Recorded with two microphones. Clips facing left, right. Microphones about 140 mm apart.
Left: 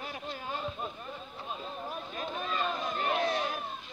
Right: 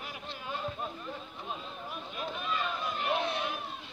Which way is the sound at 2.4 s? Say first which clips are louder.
Left 2 dB; 40° left (ahead or behind).